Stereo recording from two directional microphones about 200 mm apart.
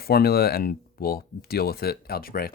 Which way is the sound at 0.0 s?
50° left (ahead or behind).